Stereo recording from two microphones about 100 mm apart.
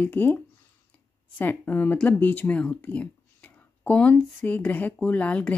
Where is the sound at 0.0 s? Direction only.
20° left (ahead or behind).